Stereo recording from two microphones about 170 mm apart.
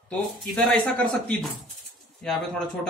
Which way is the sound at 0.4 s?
5° left (ahead or behind).